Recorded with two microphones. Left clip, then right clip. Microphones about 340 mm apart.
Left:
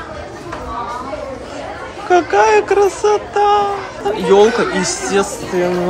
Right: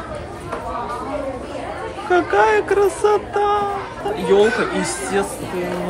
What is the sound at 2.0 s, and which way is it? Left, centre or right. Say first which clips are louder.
Speech: left 4 dB; centre.